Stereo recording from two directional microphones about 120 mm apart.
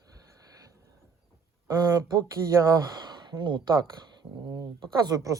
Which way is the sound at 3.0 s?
35° right (ahead or behind).